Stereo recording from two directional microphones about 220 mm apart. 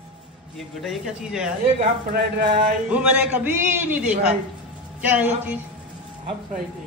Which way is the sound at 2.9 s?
5° right (ahead or behind).